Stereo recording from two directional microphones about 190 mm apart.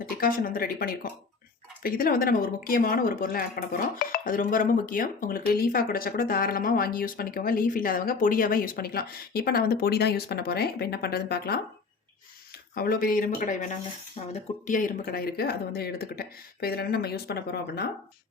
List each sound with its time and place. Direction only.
0.0 s a woman's voice: 50° left (ahead or behind)
12.7 s a woman's voice: 50° left (ahead or behind)